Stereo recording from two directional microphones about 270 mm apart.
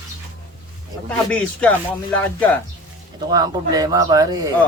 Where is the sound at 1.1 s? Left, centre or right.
Centre.